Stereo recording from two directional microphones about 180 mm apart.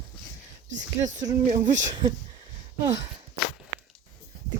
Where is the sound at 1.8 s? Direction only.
20° right (ahead or behind).